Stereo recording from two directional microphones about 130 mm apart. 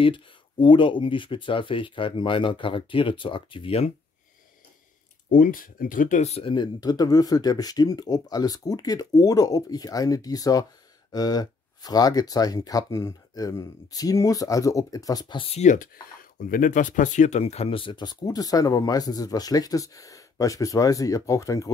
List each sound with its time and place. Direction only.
0.0 s speech: 40° left (ahead or behind)
5.3 s speech: 90° left; by 6.4 s 65° left (ahead or behind)
6.4 s speech: 35° left (ahead or behind)
15.6 s speech: 80° left; by 21.7 s 25° left (ahead or behind)